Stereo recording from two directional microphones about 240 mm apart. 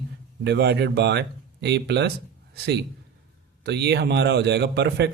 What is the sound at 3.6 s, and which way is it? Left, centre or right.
Speech, right.